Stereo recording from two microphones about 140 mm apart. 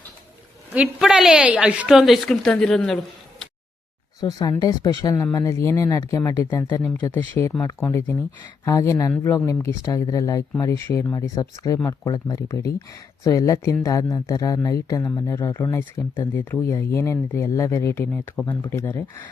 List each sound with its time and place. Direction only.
0.9 s a woman's voice: 5° right (ahead or behind)
4.2 s speech: 25° left (ahead or behind)